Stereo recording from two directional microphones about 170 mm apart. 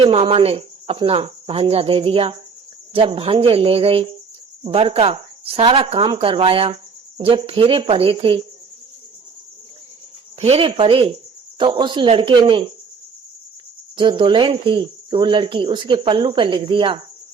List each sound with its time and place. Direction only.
0.0 s cricket: 35° right (ahead or behind)
10.4 s cricket: 40° right (ahead or behind)
13.9 s speech: 30° right (ahead or behind)